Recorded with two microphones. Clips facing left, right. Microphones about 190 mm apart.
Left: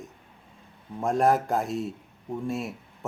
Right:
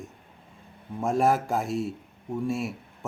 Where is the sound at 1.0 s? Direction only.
5° right (ahead or behind).